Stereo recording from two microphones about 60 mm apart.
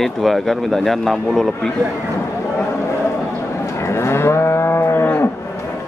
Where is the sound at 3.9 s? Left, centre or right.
Left.